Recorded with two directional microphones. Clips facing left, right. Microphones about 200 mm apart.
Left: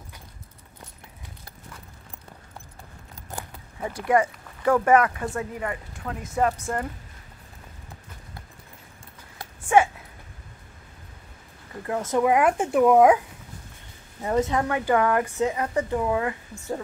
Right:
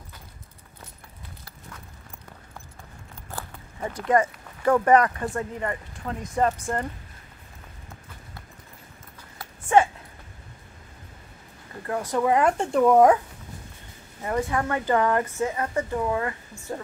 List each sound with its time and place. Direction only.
3.3 s walk: 15° left (ahead or behind)
4.8 s speech: 5° left (ahead or behind)
9.7 s a sound: 10° left (ahead or behind)
12.0 s speech: 15° left (ahead or behind)
14.2 s speech: 20° left (ahead or behind)